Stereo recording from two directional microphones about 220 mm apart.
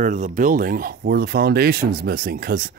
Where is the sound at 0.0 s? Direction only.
35° right (ahead or behind).